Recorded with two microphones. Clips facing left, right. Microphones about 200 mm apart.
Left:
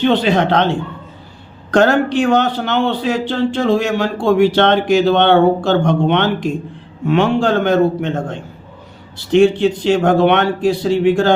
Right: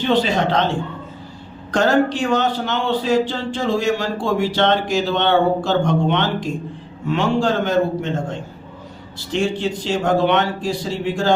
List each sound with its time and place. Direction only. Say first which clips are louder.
0.0 s a man's voice: left 4 dB; 60° left (ahead or behind)
1.7 s a man's voice: left 4 dB; 65° left (ahead or behind)
9.1 s a man's voice: left 10 dB; 60° left (ahead or behind)